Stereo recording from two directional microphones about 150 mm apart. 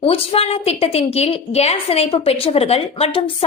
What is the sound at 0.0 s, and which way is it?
A woman's voice, 40° left (ahead or behind).